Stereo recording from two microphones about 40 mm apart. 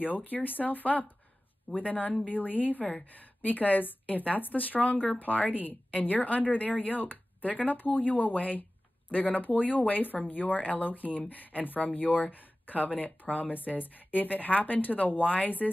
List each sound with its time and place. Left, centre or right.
0.0 s a woman's voice: left